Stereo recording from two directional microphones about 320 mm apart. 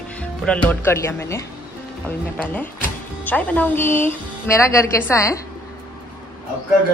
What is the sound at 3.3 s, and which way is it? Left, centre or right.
A woman's voice, centre.